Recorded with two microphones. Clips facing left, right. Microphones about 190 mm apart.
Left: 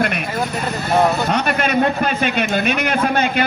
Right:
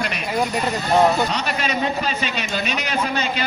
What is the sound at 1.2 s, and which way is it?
A man's voice, 55° left (ahead or behind).